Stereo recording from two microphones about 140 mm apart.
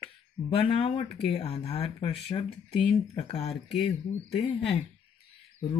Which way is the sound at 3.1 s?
45° left (ahead or behind).